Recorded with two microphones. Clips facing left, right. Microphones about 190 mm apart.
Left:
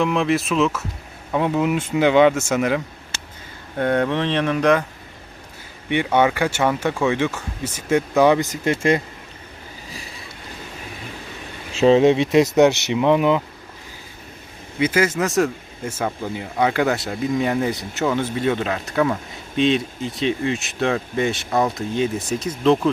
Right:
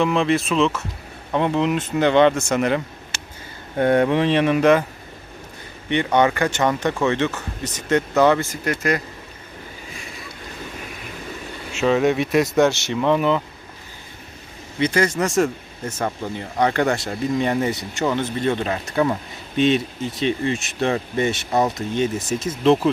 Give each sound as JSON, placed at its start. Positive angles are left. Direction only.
{"t": 0.0, "sound": "speech", "side_deg": 0}
{"t": 5.9, "sound": "speech", "side_deg": 10}
{"t": 11.7, "sound": "speech", "side_deg": 30}
{"t": 14.8, "sound": "speech", "side_deg": 5}